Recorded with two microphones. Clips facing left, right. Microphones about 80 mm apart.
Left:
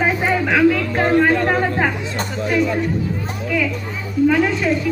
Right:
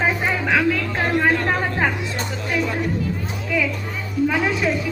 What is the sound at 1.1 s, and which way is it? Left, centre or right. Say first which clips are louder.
Chatter: left 4 dB; centre.